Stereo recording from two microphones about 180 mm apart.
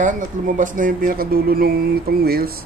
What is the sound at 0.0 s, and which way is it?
Speech, 45° right (ahead or behind).